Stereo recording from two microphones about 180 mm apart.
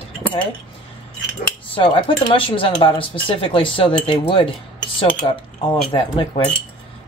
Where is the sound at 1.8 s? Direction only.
30° left (ahead or behind).